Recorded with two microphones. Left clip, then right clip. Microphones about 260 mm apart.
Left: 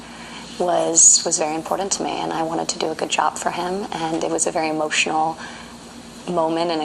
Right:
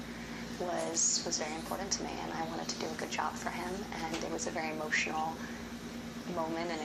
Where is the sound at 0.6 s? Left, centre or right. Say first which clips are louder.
Left 18 dB; left.